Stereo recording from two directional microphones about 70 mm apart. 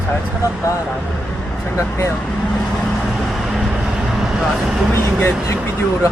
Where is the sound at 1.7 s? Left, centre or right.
Left.